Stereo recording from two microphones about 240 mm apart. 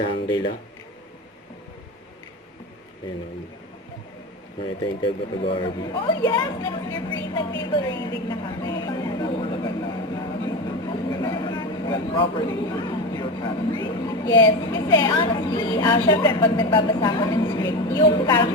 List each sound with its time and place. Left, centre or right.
0.0 s a woman's voice: centre
5.0 s a woman's voice: left